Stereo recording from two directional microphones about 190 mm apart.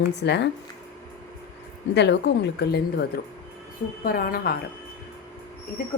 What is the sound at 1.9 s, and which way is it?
A woman's voice, 65° left (ahead or behind).